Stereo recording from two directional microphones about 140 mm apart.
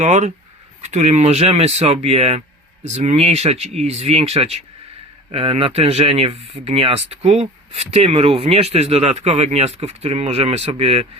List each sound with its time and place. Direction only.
0.0 s speech: 55° right (ahead or behind)